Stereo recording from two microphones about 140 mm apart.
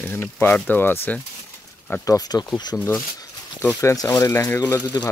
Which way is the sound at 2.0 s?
25° left (ahead or behind).